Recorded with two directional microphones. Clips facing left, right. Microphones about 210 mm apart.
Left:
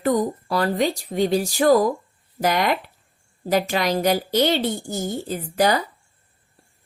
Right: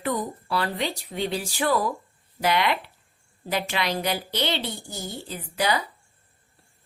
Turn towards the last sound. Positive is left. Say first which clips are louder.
# left 6 dB
turn(degrees=45)  # may be behind; listen again after turning